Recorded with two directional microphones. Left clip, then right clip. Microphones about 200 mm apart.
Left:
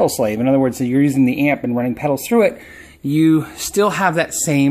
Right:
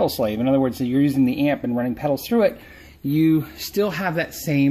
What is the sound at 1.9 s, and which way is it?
Speech, 10° left (ahead or behind).